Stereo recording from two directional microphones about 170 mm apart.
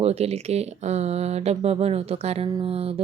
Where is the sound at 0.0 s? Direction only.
40° right (ahead or behind).